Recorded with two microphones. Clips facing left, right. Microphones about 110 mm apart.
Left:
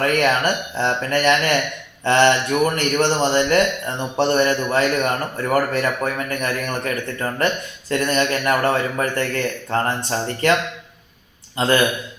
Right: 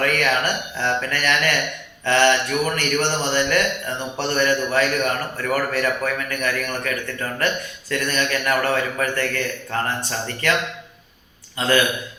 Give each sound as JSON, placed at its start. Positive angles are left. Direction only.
{"t": 0.0, "sound": "speech", "side_deg": 25}
{"t": 11.5, "sound": "speech", "side_deg": 25}